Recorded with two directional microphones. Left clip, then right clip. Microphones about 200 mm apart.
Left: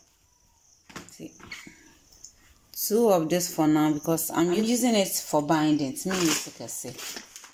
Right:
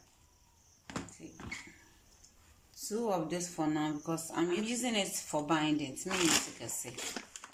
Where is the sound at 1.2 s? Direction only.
45° left (ahead or behind).